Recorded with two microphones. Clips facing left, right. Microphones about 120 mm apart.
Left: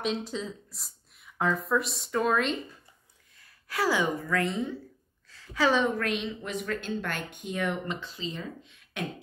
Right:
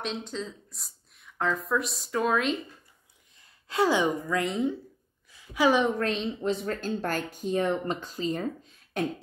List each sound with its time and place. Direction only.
0.0 s speech: 5° left (ahead or behind)
3.3 s a woman's voice: 20° right (ahead or behind)
5.9 s speech: 30° right (ahead or behind)